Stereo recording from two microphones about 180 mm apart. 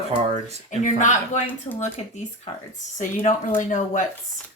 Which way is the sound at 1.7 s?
30° left (ahead or behind).